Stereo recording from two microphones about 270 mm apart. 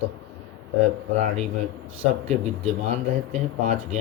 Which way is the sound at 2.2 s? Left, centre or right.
Right.